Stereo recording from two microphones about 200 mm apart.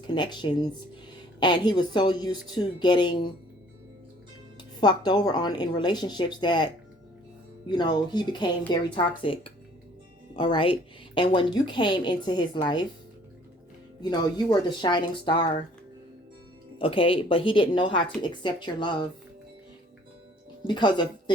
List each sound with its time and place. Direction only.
0.1 s speech: 20° left (ahead or behind)
4.8 s speech: 20° left (ahead or behind)
7.7 s speech: 20° left (ahead or behind)
14.0 s speech: 20° left (ahead or behind)
16.7 s speech: 25° left (ahead or behind)
20.7 s speech: 20° left (ahead or behind)